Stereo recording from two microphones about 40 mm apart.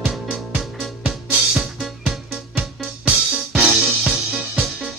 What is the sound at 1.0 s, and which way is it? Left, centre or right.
Music, centre.